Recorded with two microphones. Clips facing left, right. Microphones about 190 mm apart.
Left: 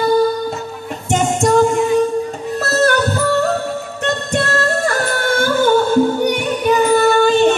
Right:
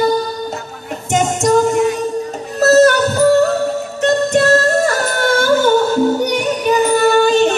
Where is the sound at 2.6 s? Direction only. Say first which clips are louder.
Right 6 dB; 40° right (ahead or behind).